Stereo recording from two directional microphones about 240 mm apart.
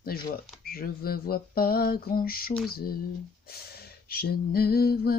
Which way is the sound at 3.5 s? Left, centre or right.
Left.